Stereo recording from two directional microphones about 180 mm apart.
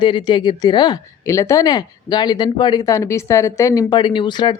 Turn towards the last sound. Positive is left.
turn(degrees=25)  # may be behind; listen again after turning